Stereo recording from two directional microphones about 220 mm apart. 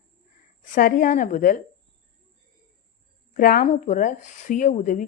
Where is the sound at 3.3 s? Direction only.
40° left (ahead or behind).